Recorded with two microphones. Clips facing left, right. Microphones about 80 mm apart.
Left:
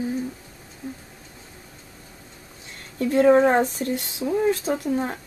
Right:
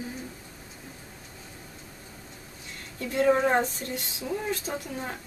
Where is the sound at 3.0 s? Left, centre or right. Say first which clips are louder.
Left 7 dB; left.